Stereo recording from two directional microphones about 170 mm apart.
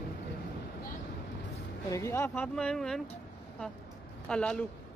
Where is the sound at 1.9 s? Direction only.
15° left (ahead or behind).